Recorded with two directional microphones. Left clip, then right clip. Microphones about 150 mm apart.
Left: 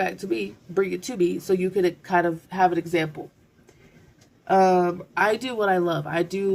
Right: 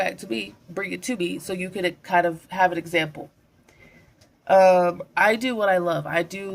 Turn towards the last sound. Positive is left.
turn(degrees=-30)  # may be behind; listen again after turning